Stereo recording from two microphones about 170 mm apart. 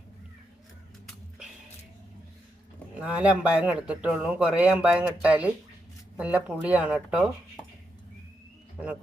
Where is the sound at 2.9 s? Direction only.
10° right (ahead or behind).